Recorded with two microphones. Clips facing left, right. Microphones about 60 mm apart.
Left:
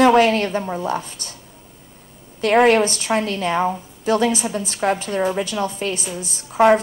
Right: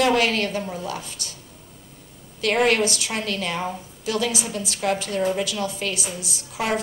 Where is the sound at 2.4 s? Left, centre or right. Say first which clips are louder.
Left 6 dB; left.